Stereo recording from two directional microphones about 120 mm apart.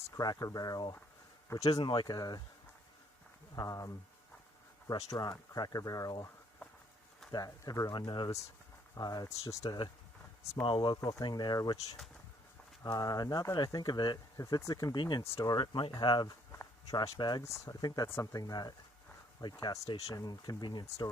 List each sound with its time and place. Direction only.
0.1 s speech: 30° left (ahead or behind)
3.5 s speech: 30° left (ahead or behind)
7.3 s speech: 30° left (ahead or behind)
10.6 s speech: 40° left (ahead or behind)